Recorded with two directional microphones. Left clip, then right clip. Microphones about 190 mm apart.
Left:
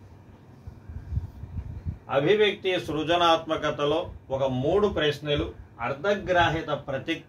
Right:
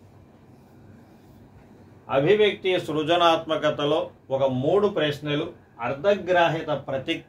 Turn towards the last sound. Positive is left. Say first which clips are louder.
# right 3 dB
turn(degrees=-20)  # may be behind; listen again after turning